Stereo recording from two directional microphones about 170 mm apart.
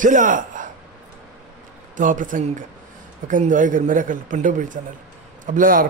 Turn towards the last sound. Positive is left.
turn(degrees=-55)  # may be behind; listen again after turning